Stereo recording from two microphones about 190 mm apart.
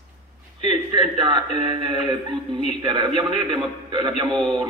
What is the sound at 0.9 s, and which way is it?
Speech, 25° right (ahead or behind).